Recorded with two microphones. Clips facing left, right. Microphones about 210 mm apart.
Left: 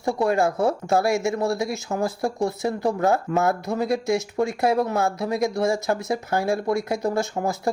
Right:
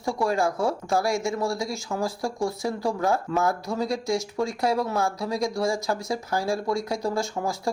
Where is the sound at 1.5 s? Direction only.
60° left (ahead or behind).